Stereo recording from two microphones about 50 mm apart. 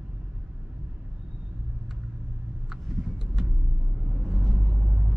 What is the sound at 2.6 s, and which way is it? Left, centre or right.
Vehicle, centre.